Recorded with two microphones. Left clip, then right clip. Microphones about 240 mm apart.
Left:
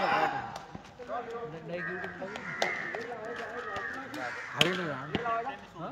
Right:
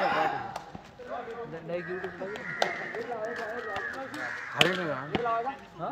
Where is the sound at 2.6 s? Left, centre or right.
Centre.